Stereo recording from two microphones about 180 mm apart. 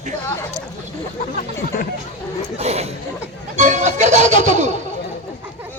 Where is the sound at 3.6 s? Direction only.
40° right (ahead or behind).